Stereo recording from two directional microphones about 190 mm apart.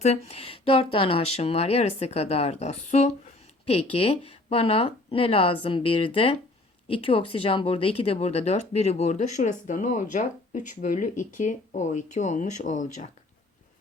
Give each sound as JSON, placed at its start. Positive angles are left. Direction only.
{"t": 0.0, "sound": "speech", "side_deg": 35}